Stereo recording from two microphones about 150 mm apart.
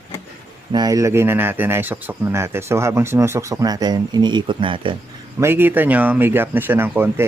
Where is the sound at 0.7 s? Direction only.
25° right (ahead or behind).